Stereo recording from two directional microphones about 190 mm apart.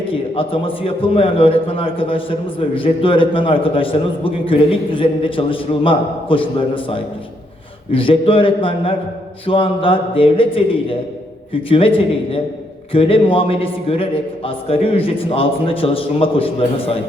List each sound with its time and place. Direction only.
0.0 s a man's voice: 30° left (ahead or behind)